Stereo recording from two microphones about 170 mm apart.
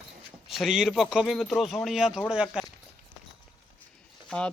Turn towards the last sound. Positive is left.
turn(degrees=5)  # may be behind; listen again after turning